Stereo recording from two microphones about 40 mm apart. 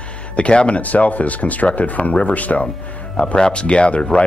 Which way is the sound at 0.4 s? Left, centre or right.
Left.